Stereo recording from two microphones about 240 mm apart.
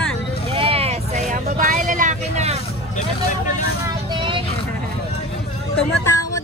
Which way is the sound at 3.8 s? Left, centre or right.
Centre.